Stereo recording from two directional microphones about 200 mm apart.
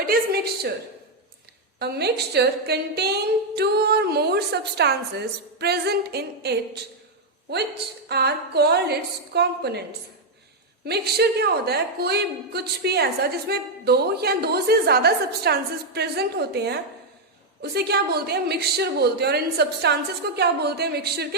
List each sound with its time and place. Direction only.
0.0 s a woman's voice: 50° right (ahead or behind)
1.8 s a woman's voice: 55° right (ahead or behind)
10.8 s a woman's voice: 55° right (ahead or behind)